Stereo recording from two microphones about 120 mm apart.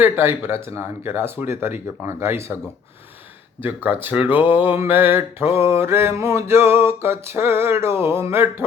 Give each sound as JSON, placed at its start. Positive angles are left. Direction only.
{"t": 0.0, "sound": "speech", "side_deg": -20}
{"t": 3.6, "sound": "speech", "side_deg": -15}